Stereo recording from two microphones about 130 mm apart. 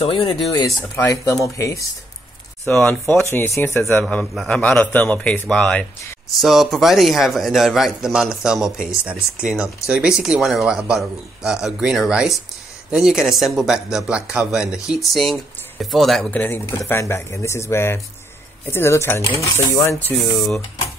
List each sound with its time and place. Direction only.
0.0 s speech: 45° left (ahead or behind)
0.5 s speech: 25° left (ahead or behind)
2.6 s a man's voice: 10° left (ahead or behind)
4.0 s a man's voice: 5° left (ahead or behind)
16.3 s speech: 15° left (ahead or behind)
20.3 s a man's voice: centre (ahead or behind)